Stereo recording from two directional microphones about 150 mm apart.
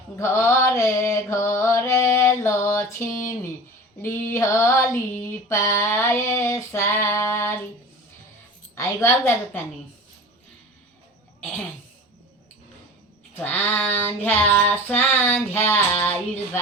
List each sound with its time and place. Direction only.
0.2 s a sound: 15° left (ahead or behind)
4.0 s female singing: 20° left (ahead or behind)
8.7 s a woman's voice: 20° left (ahead or behind)
13.4 s female singing: 15° left (ahead or behind)